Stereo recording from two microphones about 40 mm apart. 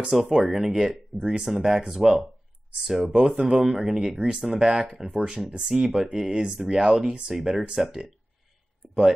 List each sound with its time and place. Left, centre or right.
0.1 s speech: centre
1.5 s speech: centre
8.8 s a sound: centre